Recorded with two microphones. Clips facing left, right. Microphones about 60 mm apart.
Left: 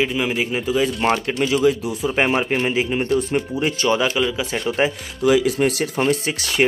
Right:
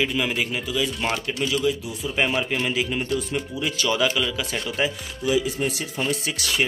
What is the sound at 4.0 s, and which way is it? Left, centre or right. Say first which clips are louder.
Speech: left 3 dB; left.